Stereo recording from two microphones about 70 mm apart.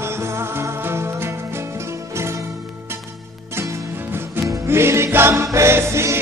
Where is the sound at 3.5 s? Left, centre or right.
Right.